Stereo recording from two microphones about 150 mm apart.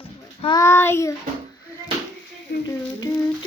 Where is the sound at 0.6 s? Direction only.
15° left (ahead or behind).